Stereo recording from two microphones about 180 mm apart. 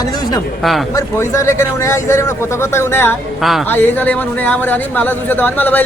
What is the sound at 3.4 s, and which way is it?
Speech, centre (ahead or behind).